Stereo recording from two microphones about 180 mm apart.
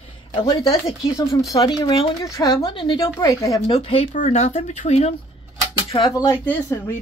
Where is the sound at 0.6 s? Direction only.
20° left (ahead or behind).